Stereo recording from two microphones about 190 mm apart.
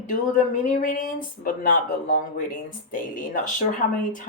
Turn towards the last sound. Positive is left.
turn(degrees=45)  # may be behind; listen again after turning